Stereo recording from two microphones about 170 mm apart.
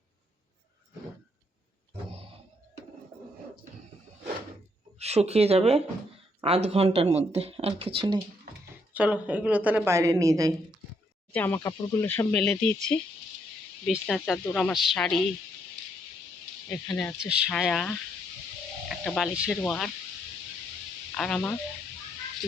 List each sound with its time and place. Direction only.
4.9 s speech: 40° right (ahead or behind)
8.9 s a woman's voice: 10° right (ahead or behind)
11.3 s speech: 10° left (ahead or behind)
16.6 s speech: 5° left (ahead or behind)
21.2 s speech: 5° left (ahead or behind)